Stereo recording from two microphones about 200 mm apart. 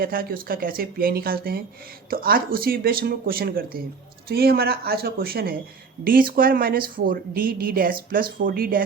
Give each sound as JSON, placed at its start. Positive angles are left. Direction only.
{"t": 0.0, "sound": "speech", "side_deg": -45}